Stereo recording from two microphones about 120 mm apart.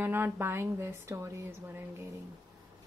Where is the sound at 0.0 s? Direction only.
20° right (ahead or behind).